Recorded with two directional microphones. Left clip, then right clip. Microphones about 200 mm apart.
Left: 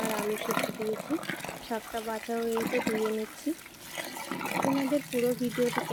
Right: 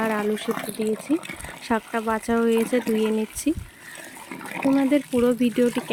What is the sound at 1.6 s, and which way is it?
Speech, 60° right (ahead or behind).